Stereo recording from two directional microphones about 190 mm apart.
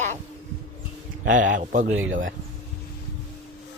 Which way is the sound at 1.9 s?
90° right.